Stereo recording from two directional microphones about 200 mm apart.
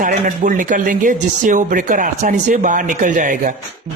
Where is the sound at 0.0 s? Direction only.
40° right (ahead or behind).